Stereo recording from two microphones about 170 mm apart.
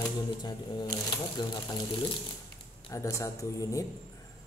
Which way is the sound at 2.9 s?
20° left (ahead or behind).